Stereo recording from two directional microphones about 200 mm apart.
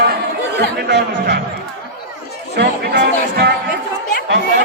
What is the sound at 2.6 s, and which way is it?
Speech, 55° right (ahead or behind).